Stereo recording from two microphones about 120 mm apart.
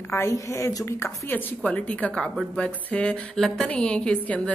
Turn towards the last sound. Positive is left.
turn(degrees=10)  # may be behind; listen again after turning